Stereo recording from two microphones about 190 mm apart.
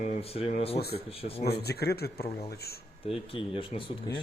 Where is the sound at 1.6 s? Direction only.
60° left (ahead or behind).